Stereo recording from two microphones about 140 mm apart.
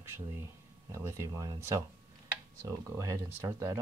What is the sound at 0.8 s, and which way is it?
Speech, 20° right (ahead or behind).